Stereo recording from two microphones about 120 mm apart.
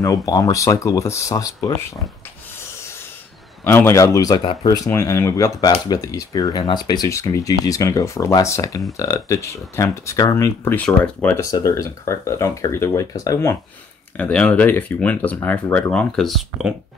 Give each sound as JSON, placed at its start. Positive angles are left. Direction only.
{"t": 0.0, "sound": "speech", "side_deg": 30}
{"t": 3.6, "sound": "speech", "side_deg": 20}
{"t": 11.3, "sound": "speech", "side_deg": 25}
{"t": 14.1, "sound": "speech", "side_deg": 10}